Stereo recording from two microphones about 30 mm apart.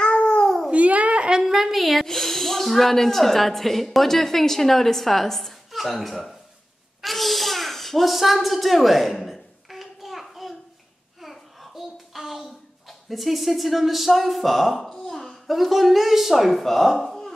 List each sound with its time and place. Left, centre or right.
0.0 s cat: left
0.7 s a sound: right
1.4 s a woman's voice: centre
2.0 s speech: centre
7.0 s a sound: centre
11.1 s child singing: centre
13.1 s a child's voice: centre